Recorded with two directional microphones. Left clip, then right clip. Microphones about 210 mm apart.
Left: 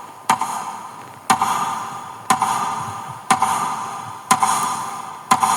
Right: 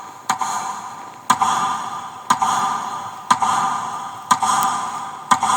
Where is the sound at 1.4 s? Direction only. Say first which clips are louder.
Right 2 dB; 40° left (ahead or behind).